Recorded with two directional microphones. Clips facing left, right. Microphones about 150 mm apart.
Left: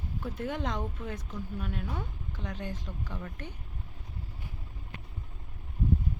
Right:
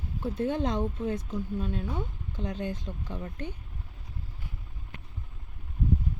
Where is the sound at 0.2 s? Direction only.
25° right (ahead or behind).